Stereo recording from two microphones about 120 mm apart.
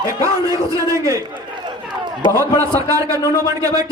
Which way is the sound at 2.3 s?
25° right (ahead or behind).